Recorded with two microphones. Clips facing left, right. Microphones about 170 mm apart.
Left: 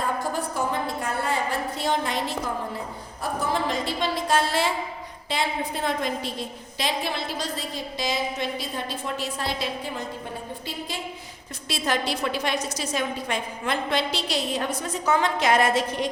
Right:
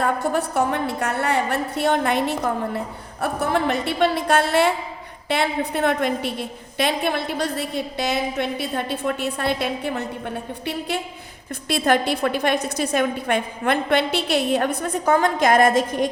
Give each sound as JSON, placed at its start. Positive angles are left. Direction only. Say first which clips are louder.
{"t": 0.0, "sound": "a woman's voice", "louder": "right 6 dB", "side_deg": -65}